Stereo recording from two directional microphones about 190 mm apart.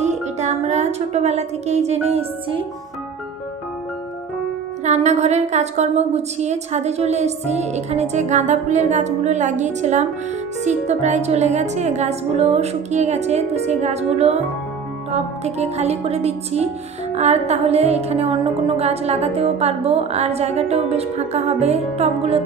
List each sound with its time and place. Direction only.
0.0 s music: 35° right (ahead or behind)
4.8 s music: 35° right (ahead or behind)